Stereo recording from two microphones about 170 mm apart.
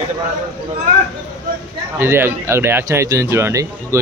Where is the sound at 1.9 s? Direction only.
15° right (ahead or behind).